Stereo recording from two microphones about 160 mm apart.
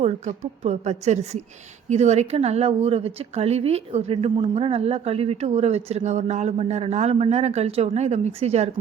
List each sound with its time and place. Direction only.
0.0 s a woman's voice: 45° right (ahead or behind)